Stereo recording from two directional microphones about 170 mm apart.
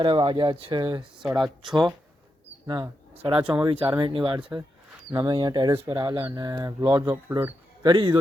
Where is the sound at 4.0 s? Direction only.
30° right (ahead or behind).